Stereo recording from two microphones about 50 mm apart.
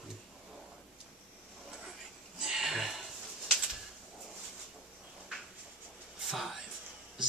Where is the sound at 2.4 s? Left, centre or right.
Centre.